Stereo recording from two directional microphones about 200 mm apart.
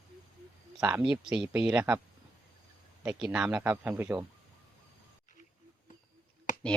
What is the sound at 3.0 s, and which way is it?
Speech, 5° right (ahead or behind).